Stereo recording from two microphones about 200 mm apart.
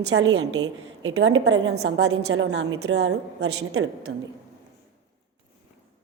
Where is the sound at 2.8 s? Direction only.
60° right (ahead or behind).